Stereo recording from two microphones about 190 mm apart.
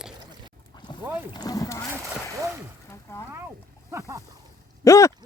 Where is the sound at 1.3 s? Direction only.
20° left (ahead or behind).